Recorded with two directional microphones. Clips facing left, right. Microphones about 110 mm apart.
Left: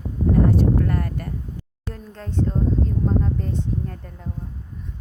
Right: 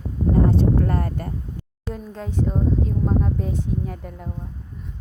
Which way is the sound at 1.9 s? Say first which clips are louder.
Right 1 dB; 10° right (ahead or behind).